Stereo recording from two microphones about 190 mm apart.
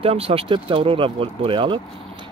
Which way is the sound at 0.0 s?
30° right (ahead or behind).